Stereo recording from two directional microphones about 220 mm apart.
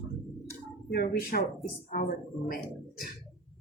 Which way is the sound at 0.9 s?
45° left (ahead or behind).